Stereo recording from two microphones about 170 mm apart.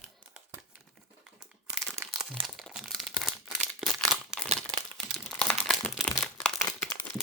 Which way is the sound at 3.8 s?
Centre (ahead or behind).